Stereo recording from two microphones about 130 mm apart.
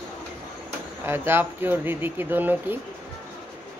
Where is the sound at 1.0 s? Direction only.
15° right (ahead or behind).